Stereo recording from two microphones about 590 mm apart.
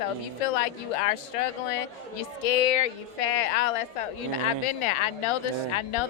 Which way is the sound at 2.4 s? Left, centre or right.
Left.